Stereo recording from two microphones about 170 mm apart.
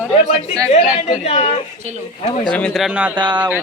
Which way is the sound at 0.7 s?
35° left (ahead or behind).